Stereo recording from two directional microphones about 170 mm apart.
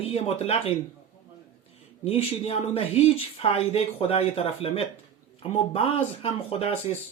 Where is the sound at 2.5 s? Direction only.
35° left (ahead or behind).